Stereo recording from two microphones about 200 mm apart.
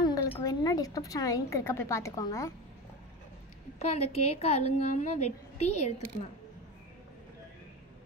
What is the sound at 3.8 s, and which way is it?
A woman's voice, 30° left (ahead or behind).